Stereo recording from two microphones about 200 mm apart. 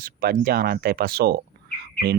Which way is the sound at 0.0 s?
50° right (ahead or behind).